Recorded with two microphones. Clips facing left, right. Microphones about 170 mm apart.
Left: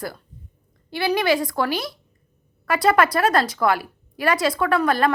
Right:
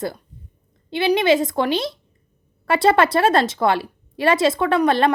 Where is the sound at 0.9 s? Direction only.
20° right (ahead or behind).